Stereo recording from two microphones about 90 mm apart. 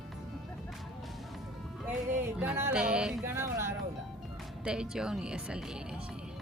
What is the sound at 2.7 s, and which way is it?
Speech, 10° right (ahead or behind).